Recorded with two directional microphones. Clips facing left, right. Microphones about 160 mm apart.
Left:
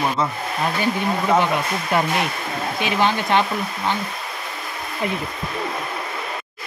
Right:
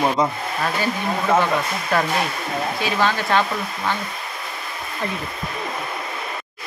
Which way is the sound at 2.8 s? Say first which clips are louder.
Left 3 dB; 20° left (ahead or behind).